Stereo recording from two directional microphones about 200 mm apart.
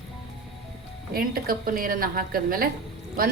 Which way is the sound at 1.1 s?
45° right (ahead or behind).